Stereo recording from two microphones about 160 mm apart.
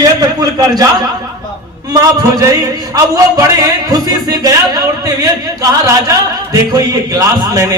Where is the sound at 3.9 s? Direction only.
25° right (ahead or behind).